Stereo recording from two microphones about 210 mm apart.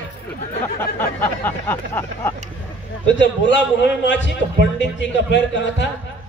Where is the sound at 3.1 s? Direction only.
60° left (ahead or behind).